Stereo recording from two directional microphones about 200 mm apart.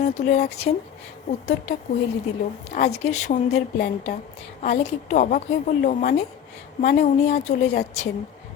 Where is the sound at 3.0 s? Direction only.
35° left (ahead or behind).